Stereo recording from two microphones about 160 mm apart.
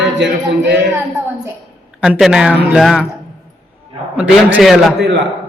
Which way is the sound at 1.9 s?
5° right (ahead or behind).